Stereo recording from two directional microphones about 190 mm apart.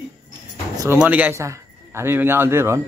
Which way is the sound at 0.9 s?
10° right (ahead or behind).